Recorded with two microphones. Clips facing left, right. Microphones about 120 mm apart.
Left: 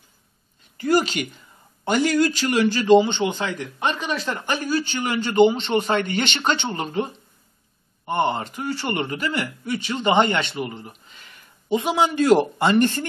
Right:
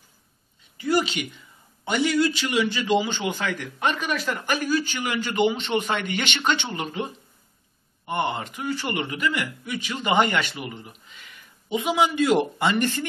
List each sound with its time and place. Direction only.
0.7 s a man's voice: 45° left (ahead or behind)